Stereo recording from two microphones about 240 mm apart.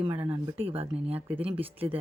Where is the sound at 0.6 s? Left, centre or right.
Right.